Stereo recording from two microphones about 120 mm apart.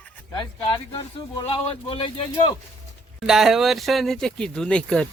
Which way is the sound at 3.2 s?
5° right (ahead or behind).